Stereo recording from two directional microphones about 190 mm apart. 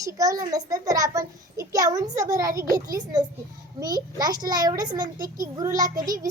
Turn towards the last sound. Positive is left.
turn(degrees=-20)  # may be behind; listen again after turning